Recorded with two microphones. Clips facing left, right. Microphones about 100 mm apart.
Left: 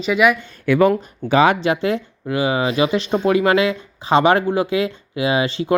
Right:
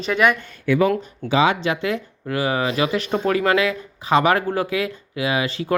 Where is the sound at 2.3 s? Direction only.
20° left (ahead or behind).